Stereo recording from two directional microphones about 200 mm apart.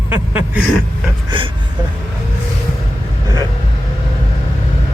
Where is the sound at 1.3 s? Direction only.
25° right (ahead or behind).